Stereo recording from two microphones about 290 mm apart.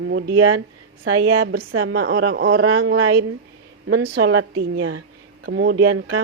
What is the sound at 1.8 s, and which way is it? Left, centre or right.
A woman's voice, right.